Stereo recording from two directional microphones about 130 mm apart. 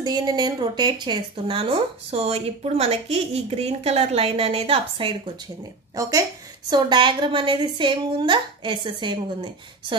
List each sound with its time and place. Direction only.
0.0 s speech: 30° right (ahead or behind)
5.9 s a woman's voice: 25° right (ahead or behind)